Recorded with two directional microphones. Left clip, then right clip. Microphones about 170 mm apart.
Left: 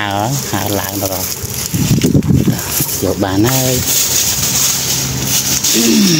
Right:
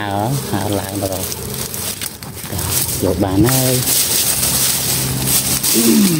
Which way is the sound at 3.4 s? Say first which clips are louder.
Left 1 dB; 15° left (ahead or behind).